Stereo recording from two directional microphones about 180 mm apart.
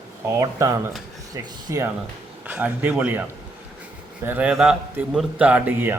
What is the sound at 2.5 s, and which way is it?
Speech, 10° right (ahead or behind).